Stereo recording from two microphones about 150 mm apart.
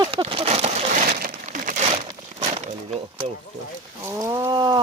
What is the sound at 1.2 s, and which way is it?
Crumpling, 65° right (ahead or behind).